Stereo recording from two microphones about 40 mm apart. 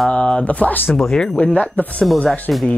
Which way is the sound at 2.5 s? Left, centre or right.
Centre.